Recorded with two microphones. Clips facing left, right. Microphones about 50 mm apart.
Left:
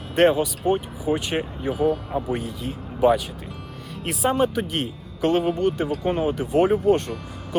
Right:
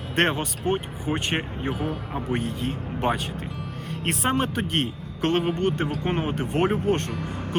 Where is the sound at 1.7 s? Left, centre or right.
Centre.